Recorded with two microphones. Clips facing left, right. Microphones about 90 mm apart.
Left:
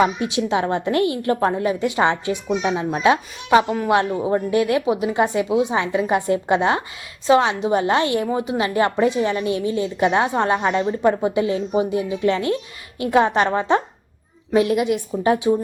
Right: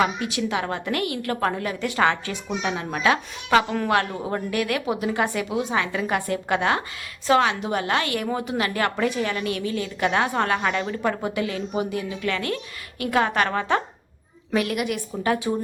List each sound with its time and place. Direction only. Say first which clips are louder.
0.0 s a woman's voice: left 4 dB; 25° left (ahead or behind)